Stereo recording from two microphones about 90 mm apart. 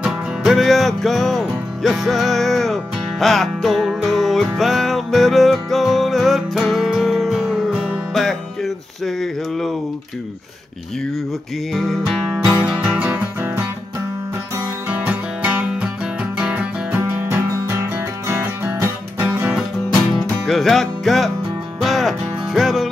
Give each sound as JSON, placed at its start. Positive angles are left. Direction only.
{"t": 0.0, "sound": "music", "side_deg": -5}
{"t": 8.1, "sound": "music", "side_deg": 0}
{"t": 11.7, "sound": "music", "side_deg": 0}
{"t": 12.4, "sound": "music", "side_deg": -10}
{"t": 14.9, "sound": "music", "side_deg": -15}
{"t": 20.4, "sound": "music", "side_deg": 5}